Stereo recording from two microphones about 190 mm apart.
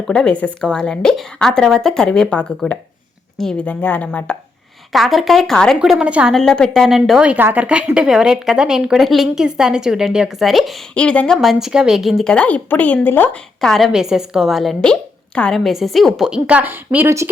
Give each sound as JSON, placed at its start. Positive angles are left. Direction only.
{"t": 0.1, "sound": "a woman's voice", "side_deg": 5}